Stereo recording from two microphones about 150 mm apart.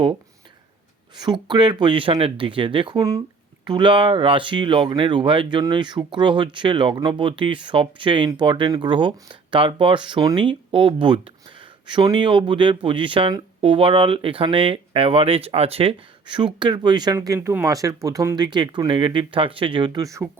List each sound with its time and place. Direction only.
1.1 s speech: 30° right (ahead or behind)
3.0 s speech: 20° right (ahead or behind)